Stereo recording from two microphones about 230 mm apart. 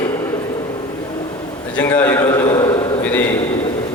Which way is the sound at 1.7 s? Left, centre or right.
Centre.